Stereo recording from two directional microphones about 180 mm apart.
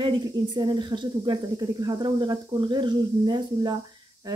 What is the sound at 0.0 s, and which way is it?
Speech, 25° right (ahead or behind).